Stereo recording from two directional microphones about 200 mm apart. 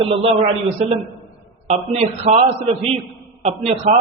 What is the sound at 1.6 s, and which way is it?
A man's voice, 35° right (ahead or behind).